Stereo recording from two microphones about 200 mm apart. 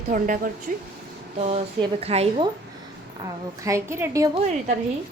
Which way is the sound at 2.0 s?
30° right (ahead or behind).